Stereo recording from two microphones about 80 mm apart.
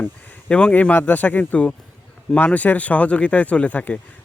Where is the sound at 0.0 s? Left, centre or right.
Centre.